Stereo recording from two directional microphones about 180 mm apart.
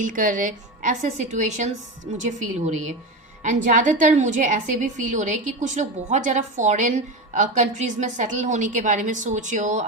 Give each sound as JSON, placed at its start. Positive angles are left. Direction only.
{"t": 0.0, "sound": "a woman's voice", "side_deg": -45}
{"t": 3.4, "sound": "a woman's voice", "side_deg": -45}